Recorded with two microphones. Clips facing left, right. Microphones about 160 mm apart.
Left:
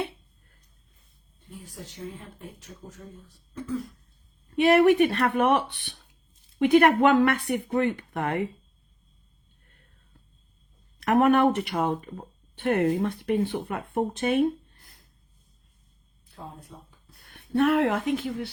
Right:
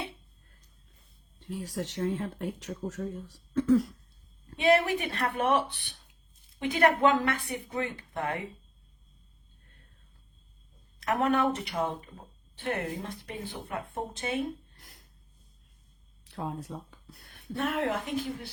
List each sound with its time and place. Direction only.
1.4 s speech: 85° right
4.5 s speech: 65° left (ahead or behind)
5.8 s speech: 60° left (ahead or behind)
11.0 s speech: 60° left (ahead or behind)
14.8 s a sound: 80° right
16.2 s a sound: 75° right (ahead or behind)
17.2 s speech: 65° left (ahead or behind)